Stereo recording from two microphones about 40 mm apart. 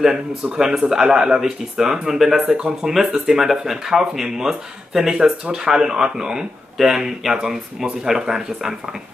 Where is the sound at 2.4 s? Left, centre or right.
Right.